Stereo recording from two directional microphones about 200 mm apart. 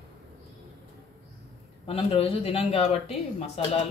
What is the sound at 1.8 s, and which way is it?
Speech, 30° left (ahead or behind).